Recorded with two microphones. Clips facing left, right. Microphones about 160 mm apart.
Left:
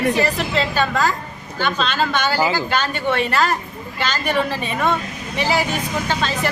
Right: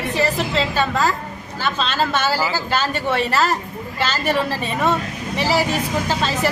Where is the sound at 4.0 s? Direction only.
5° right (ahead or behind).